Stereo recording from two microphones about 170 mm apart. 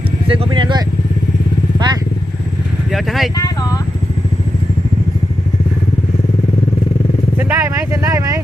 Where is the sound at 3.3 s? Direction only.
20° left (ahead or behind).